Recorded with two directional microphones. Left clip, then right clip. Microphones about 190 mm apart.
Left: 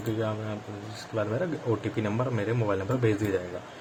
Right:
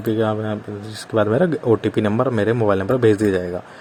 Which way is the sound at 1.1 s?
40° right (ahead or behind).